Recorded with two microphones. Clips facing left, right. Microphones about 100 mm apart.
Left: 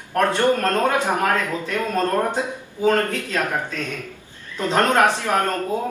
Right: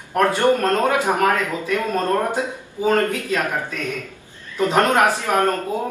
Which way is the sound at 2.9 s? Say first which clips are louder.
Right 1 dB; 15° right (ahead or behind).